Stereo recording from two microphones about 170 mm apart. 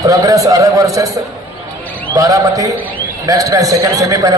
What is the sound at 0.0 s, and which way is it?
A man's voice, 20° right (ahead or behind).